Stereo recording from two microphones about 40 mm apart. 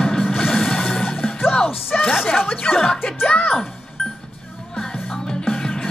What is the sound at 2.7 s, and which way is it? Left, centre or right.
Music, left.